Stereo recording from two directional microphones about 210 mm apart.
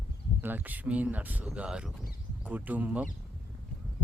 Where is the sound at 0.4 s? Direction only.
10° right (ahead or behind).